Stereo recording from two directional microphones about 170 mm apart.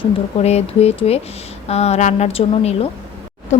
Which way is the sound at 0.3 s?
40° left (ahead or behind).